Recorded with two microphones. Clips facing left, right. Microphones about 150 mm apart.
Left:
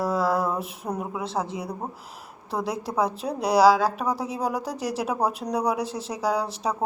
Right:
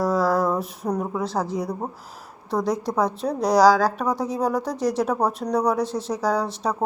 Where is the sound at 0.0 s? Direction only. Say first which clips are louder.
Right 3 dB; 5° left (ahead or behind).